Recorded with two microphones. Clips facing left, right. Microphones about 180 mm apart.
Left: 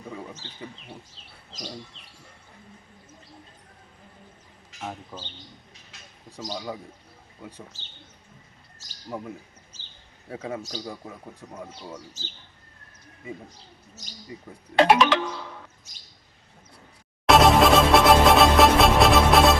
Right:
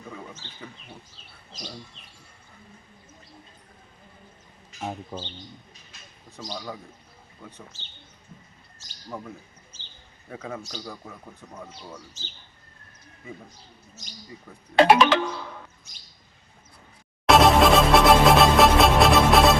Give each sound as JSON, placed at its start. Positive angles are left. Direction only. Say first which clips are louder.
{"t": 5.1, "sound": "a man's voice", "louder": "right 5 dB", "side_deg": -20}
{"t": 6.5, "sound": "a man's voice", "louder": "left 2 dB", "side_deg": 15}
{"t": 9.0, "sound": "a man's voice", "louder": "left 2 dB", "side_deg": 15}
{"t": 10.2, "sound": "speech", "louder": "left 3 dB", "side_deg": 30}
{"t": 10.7, "sound": "a man's voice", "louder": "left 2 dB", "side_deg": 15}
{"t": 14.8, "sound": "music", "louder": "right 1 dB", "side_deg": 0}
{"t": 17.2, "sound": "music", "louder": "even", "side_deg": 0}